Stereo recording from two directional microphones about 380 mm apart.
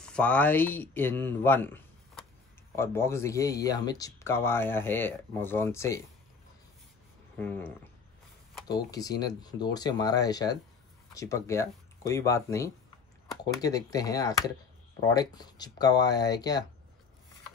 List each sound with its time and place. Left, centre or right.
0.0 s speech: centre
7.3 s speech: centre